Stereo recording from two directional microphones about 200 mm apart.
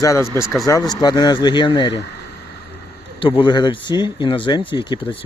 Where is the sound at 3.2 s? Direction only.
25° left (ahead or behind).